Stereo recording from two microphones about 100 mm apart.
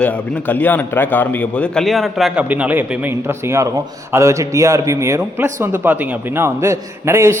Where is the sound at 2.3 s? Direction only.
15° right (ahead or behind).